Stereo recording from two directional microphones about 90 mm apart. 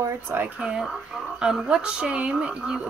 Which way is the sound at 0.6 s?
5° right (ahead or behind).